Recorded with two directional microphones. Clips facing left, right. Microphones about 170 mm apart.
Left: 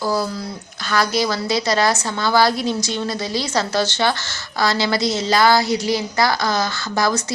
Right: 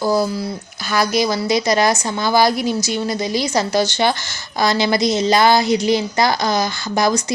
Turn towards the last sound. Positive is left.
turn(degrees=-15)  # may be behind; listen again after turning